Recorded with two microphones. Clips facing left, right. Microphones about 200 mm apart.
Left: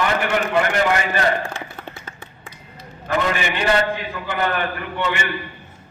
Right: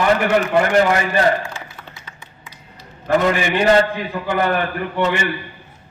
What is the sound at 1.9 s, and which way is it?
Finger snapping, 55° left (ahead or behind).